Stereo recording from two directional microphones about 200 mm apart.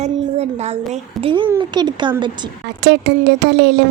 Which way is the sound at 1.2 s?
25° right (ahead or behind).